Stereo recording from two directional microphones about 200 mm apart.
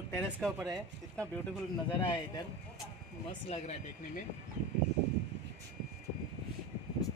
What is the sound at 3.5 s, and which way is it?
Speech, 35° left (ahead or behind).